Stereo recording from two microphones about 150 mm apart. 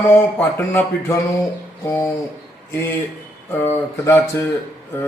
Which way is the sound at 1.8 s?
20° left (ahead or behind).